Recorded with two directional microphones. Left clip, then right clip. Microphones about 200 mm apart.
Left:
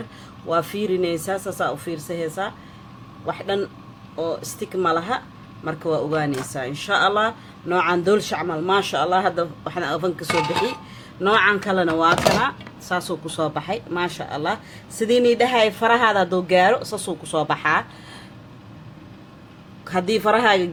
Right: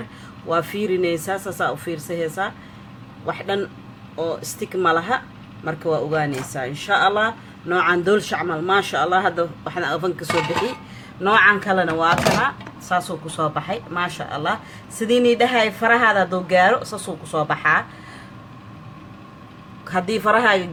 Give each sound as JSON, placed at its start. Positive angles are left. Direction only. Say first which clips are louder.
{"t": 0.4, "sound": "speech", "louder": "right 1 dB", "side_deg": 10}
{"t": 19.8, "sound": "speech", "louder": "even", "side_deg": 20}